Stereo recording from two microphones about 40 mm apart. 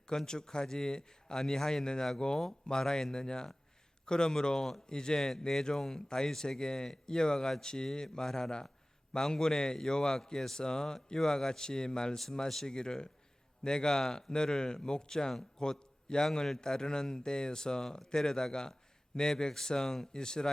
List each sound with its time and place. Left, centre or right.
0.1 s a man's voice: centre
12.1 s a man's voice: centre
12.6 s a man's voice: centre